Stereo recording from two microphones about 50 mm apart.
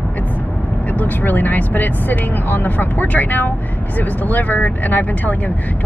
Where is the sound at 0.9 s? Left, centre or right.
Left.